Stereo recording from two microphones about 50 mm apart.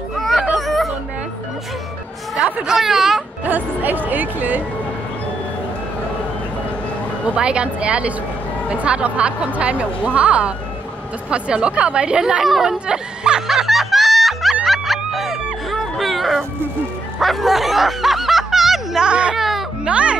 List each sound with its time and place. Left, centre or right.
0.2 s children playing: centre
0.6 s chatter: centre
2.6 s speech: centre
3.4 s speech: right
7.3 s speech: right
12.4 s speech: centre
12.8 s speech: centre
13.5 s music: centre
17.2 s a sound: centre
19.0 s baby cry: right
19.3 s baby cry: centre
19.8 s music: right